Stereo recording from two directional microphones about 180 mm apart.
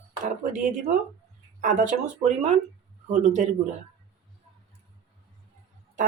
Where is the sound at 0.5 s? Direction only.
50° right (ahead or behind).